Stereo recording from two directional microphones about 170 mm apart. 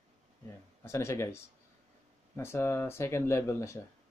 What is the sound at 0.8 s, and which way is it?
Speech, 15° left (ahead or behind).